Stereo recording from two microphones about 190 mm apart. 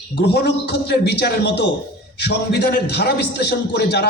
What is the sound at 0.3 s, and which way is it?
A man's voice, 60° left (ahead or behind).